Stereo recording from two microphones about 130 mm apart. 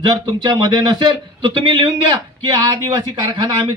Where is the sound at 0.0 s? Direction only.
35° right (ahead or behind).